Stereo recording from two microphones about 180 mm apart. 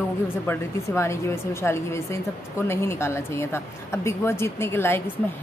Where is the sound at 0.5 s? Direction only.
15° left (ahead or behind).